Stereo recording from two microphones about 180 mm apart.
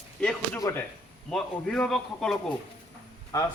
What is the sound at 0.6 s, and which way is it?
Speech, 10° left (ahead or behind).